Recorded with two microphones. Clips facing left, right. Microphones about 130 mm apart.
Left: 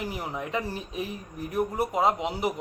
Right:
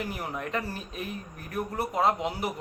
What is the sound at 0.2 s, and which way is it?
Speech, 15° left (ahead or behind).